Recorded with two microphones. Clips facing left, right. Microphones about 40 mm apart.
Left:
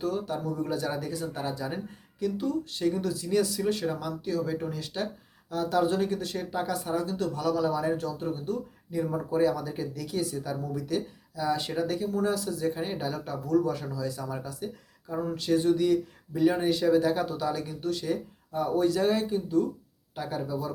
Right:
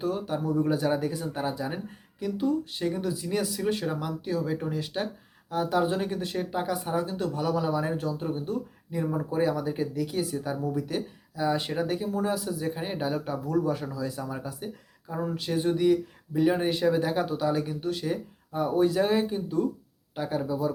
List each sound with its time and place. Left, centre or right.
0.0 s speech: right